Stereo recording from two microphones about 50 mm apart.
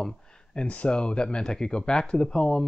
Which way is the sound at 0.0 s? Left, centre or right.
Centre.